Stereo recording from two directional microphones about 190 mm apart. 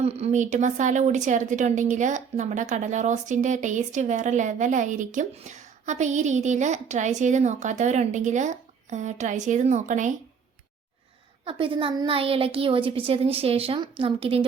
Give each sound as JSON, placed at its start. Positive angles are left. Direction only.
{"t": 0.0, "sound": "speech", "side_deg": -35}
{"t": 11.4, "sound": "a woman's voice", "side_deg": -25}